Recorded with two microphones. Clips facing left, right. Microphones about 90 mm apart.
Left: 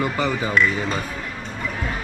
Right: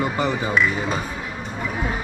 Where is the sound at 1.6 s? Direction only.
15° right (ahead or behind).